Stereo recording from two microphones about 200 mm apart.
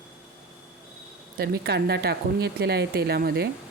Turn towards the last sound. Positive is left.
turn(degrees=-50)  # may be behind; listen again after turning